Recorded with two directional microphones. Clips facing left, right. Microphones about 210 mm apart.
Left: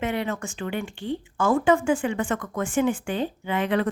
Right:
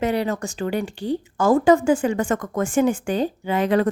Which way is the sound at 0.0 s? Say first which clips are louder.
Right 5 dB; 35° right (ahead or behind).